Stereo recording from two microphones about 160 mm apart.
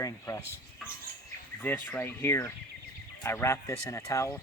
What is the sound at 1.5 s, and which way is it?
Speech, 10° left (ahead or behind).